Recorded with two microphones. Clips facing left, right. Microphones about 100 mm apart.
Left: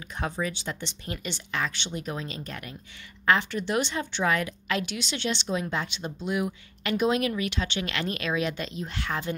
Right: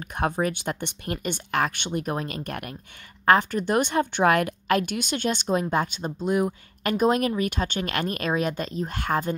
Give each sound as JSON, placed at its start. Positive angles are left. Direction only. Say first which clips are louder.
{"t": 0.0, "sound": "a woman's voice", "louder": "right 6 dB", "side_deg": -55}
{"t": 3.3, "sound": "a woman's voice", "louder": "right 5 dB", "side_deg": -45}